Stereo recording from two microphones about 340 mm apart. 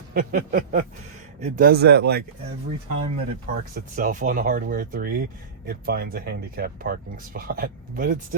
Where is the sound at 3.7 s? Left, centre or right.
Right.